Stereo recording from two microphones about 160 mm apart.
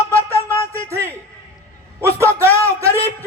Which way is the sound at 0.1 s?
20° right (ahead or behind).